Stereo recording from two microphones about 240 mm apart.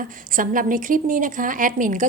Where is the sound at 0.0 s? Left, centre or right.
Right.